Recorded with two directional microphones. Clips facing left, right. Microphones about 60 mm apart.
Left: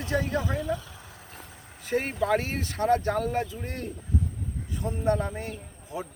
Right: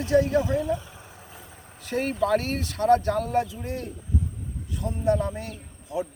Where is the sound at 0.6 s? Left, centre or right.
Right.